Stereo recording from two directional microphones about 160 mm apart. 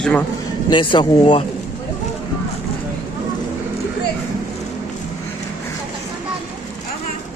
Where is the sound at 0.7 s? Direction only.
30° left (ahead or behind).